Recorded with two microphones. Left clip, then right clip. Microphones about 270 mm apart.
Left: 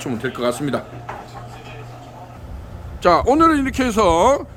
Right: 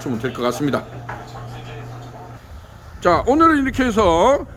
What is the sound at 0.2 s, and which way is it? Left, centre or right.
Speech, centre.